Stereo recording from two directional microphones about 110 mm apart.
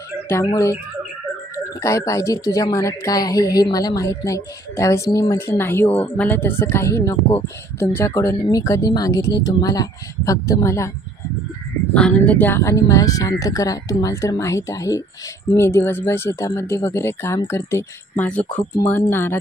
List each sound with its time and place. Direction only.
0.5 s speech: 30° left (ahead or behind)
1.8 s a woman's voice: 30° left (ahead or behind)
11.9 s speech: 10° left (ahead or behind)